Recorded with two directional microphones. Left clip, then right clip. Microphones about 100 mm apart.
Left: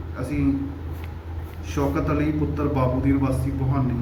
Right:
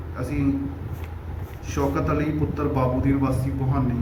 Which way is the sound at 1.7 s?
10° right (ahead or behind).